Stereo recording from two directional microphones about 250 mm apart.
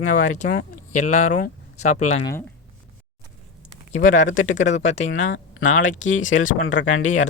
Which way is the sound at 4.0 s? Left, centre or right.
Left.